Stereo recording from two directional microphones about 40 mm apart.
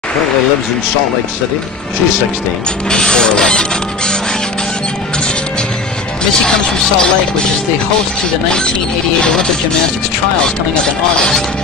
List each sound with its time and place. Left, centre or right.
2.9 s printer: centre
6.4 s speech: centre
8.5 s printer: left